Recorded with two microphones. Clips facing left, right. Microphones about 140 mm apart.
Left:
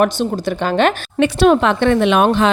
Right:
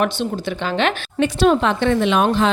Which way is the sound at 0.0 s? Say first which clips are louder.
Left 4 dB; 45° left (ahead or behind).